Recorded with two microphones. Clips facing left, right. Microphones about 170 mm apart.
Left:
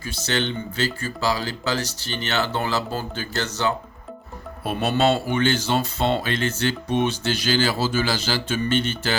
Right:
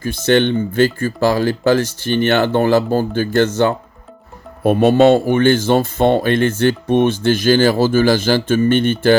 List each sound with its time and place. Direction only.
0.0 s speech: 55° right (ahead or behind)